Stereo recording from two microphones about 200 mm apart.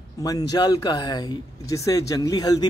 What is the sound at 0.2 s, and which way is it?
Speech, 20° left (ahead or behind).